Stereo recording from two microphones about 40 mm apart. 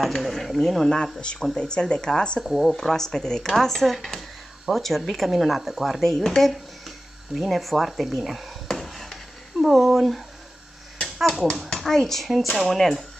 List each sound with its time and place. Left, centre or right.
0.0 s speech: centre
1.2 s speech: left
2.4 s speech: centre
2.7 s speech: centre
8.6 s a sound: centre
9.6 s speech: centre
11.1 s finger snapping: centre
11.8 s speech: centre